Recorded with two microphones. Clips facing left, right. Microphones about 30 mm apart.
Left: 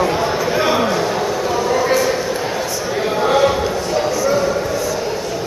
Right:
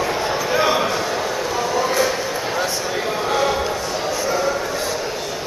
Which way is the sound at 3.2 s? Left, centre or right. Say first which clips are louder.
Left 6 dB; centre.